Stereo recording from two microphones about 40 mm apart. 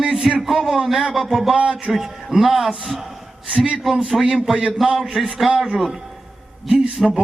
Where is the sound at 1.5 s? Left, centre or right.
Right.